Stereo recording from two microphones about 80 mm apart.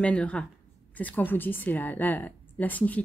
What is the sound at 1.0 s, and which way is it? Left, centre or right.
A woman's voice, left.